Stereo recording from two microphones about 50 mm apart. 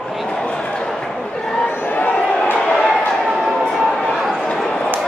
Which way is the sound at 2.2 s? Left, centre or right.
Centre.